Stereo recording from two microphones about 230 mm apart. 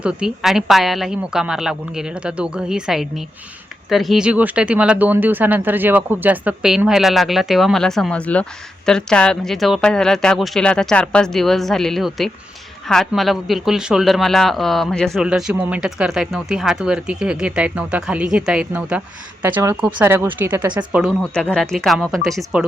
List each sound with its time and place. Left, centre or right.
0.0 s speech: centre